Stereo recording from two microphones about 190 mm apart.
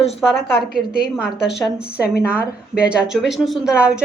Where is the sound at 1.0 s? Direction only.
65° left (ahead or behind).